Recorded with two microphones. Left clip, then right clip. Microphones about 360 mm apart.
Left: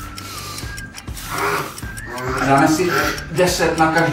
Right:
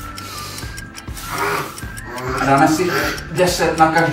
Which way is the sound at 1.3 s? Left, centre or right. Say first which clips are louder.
Even; centre.